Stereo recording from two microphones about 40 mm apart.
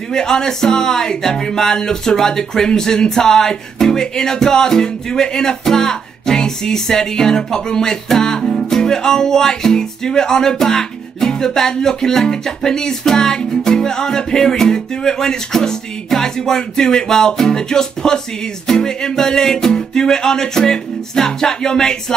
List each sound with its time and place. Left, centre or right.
0.1 s speech: centre
8.5 s music: centre
13.7 s speech: centre